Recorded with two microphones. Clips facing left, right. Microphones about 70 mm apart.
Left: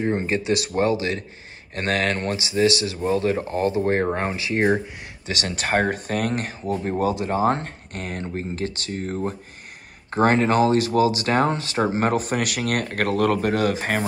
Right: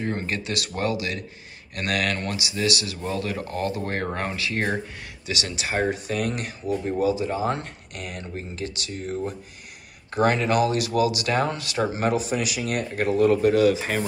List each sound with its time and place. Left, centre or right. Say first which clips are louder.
0.0 s speech: left 5 dB; centre
5.2 s speech: left 3 dB; left